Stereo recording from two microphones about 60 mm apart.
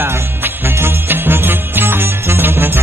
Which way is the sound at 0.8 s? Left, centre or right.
Right.